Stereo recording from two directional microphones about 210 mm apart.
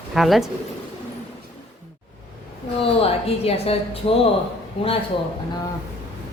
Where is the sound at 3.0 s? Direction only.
30° left (ahead or behind).